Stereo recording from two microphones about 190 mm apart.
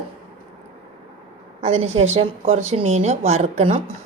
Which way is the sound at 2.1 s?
30° right (ahead or behind).